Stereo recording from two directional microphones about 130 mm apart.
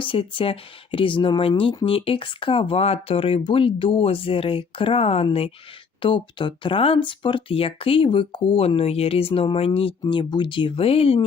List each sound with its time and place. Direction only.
0.0 s speech: 40° left (ahead or behind)
10.1 s speech: 35° left (ahead or behind)